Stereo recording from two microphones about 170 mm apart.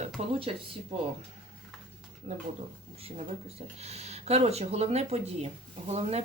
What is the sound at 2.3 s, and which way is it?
Speech, 50° right (ahead or behind).